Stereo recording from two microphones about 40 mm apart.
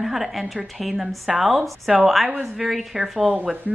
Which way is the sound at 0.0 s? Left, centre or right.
Centre.